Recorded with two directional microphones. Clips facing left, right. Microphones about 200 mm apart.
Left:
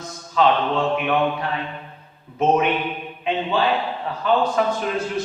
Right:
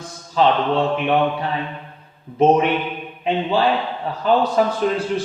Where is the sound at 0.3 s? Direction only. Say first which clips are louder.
Right 2 dB; 30° right (ahead or behind).